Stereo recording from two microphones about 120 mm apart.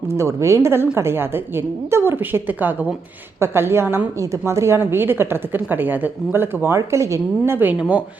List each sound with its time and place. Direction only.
0.2 s a woman's voice: 25° right (ahead or behind)